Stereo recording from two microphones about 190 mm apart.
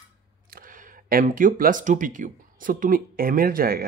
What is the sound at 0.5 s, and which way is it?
Speech, 45° right (ahead or behind).